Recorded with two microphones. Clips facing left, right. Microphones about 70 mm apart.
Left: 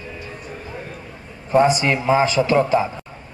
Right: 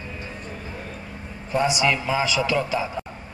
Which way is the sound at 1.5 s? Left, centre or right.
Left.